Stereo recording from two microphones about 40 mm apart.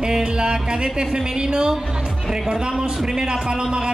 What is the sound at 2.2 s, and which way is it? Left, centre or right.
A man's voice, centre.